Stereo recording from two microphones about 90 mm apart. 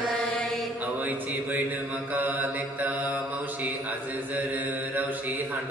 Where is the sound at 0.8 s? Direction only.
20° right (ahead or behind).